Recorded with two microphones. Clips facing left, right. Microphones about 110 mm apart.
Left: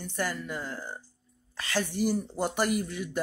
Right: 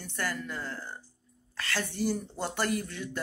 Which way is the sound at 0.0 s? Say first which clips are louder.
Left 2 dB; 15° left (ahead or behind).